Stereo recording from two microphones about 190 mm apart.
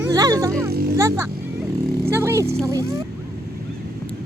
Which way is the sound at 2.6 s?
15° right (ahead or behind).